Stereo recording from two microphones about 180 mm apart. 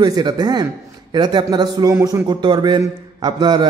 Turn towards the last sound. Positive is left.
turn(degrees=-25)  # may be behind; listen again after turning